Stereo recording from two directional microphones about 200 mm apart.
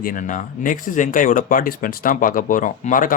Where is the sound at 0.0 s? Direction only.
40° left (ahead or behind).